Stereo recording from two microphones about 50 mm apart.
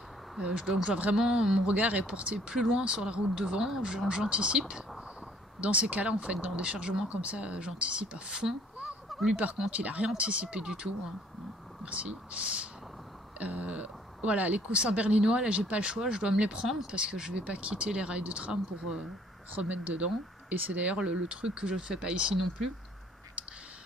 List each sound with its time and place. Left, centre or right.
0.4 s speech: right
1.1 s speech: centre
1.7 s speech: right
9.1 s fowl: centre
9.7 s speech: right
18.5 s speech: centre
19.7 s speech: right
20.8 s speech: right
22.3 s speech: centre